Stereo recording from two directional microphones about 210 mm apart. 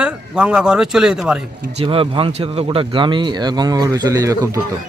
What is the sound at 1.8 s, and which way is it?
Speech, 25° right (ahead or behind).